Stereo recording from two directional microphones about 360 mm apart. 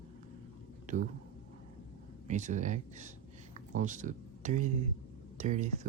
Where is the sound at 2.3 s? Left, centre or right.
Centre.